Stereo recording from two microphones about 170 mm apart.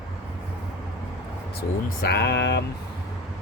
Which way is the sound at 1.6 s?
65° left (ahead or behind).